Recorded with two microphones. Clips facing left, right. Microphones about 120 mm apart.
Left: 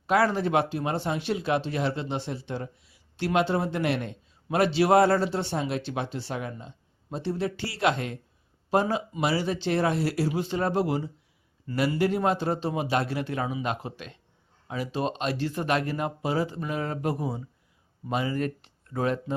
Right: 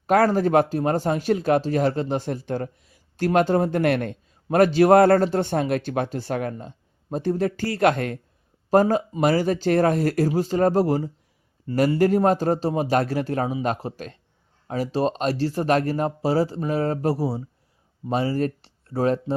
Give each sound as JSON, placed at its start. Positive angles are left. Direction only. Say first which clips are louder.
{"t": 0.1, "sound": "speech", "louder": "right 5 dB", "side_deg": -45}